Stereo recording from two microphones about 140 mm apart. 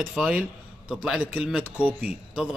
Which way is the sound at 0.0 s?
5° right (ahead or behind).